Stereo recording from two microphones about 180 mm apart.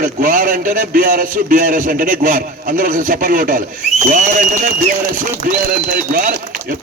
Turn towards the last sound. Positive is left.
turn(degrees=-50)  # may be behind; listen again after turning